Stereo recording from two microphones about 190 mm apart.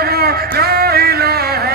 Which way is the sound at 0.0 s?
55° right (ahead or behind).